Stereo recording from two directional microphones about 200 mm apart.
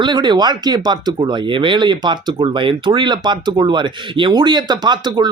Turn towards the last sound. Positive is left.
turn(degrees=-20)  # may be behind; listen again after turning